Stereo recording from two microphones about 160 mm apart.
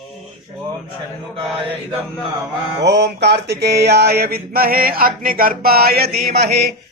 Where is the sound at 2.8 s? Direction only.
90° right.